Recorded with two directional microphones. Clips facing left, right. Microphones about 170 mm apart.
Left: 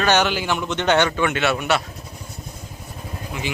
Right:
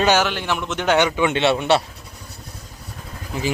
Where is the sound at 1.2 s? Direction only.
25° right (ahead or behind).